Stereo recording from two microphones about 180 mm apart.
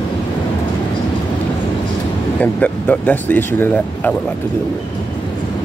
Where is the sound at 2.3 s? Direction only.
10° left (ahead or behind).